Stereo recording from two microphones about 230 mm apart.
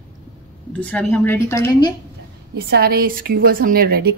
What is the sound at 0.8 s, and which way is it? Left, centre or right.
Speech, centre.